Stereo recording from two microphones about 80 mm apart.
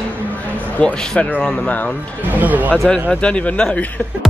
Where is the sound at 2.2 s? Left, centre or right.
Right.